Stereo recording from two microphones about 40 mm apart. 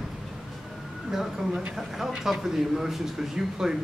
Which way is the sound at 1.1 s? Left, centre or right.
Centre.